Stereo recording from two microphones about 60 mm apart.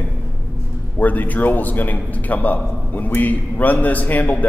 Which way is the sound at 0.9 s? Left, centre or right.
Left.